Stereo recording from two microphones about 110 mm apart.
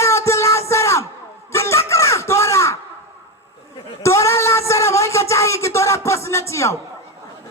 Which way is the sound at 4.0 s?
25° left (ahead or behind).